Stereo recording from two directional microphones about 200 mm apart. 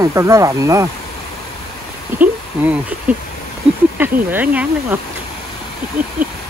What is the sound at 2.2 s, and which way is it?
Speech, 10° right (ahead or behind).